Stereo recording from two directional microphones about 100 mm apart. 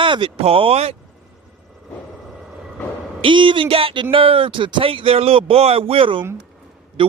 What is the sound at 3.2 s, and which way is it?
A man's voice, 55° right (ahead or behind).